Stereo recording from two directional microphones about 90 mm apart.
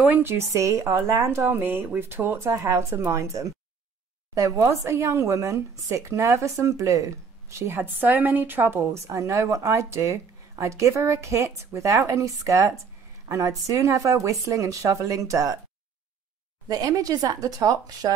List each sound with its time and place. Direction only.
0.1 s a woman's voice: 25° right (ahead or behind)
16.6 s speech: 45° right (ahead or behind)